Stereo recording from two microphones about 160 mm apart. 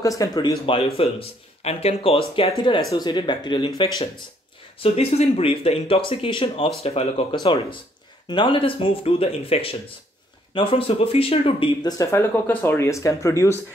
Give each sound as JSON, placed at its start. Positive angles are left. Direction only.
{"t": 0.0, "sound": "speech", "side_deg": 20}
{"t": 4.8, "sound": "speech", "side_deg": 40}
{"t": 12.0, "sound": "speech", "side_deg": 15}